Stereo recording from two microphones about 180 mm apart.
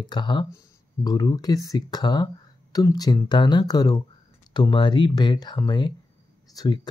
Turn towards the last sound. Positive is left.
turn(degrees=20)  # may be behind; listen again after turning